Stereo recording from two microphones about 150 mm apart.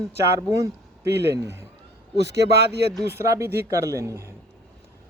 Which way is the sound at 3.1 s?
20° right (ahead or behind).